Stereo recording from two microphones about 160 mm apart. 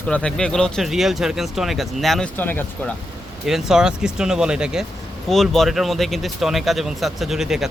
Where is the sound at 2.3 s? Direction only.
10° left (ahead or behind).